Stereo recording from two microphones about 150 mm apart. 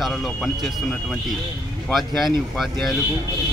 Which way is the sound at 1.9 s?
Centre (ahead or behind).